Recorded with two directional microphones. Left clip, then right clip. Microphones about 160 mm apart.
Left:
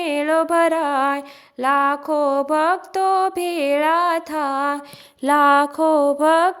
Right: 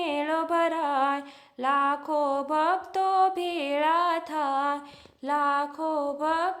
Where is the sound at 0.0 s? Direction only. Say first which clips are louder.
Left 8 dB; 30° left (ahead or behind).